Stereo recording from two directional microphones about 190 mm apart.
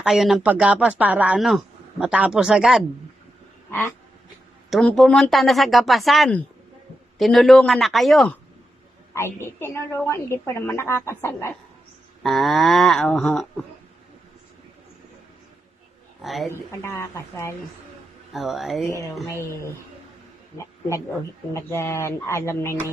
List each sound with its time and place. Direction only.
0.0 s speech: centre (ahead or behind)
3.7 s speech: 10° left (ahead or behind)
9.1 s a woman's voice: 15° left (ahead or behind)
12.2 s speech: centre (ahead or behind)
16.2 s speech: centre (ahead or behind)
16.8 s a woman's voice: 15° left (ahead or behind)
18.3 s speech: centre (ahead or behind)
19.3 s a woman's voice: 15° left (ahead or behind)
21.5 s a woman's voice: 15° left (ahead or behind)